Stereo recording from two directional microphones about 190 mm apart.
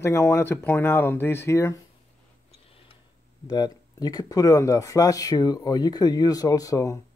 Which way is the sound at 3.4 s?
20° left (ahead or behind).